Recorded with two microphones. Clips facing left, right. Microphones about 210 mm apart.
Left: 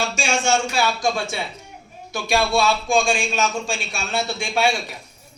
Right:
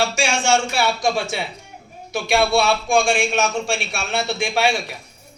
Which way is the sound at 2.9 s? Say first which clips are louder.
Right 4 dB; 65° right (ahead or behind).